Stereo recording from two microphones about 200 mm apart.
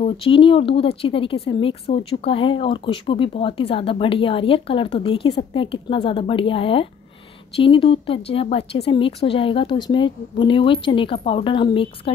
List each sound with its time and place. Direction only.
0.0 s speech: 25° left (ahead or behind)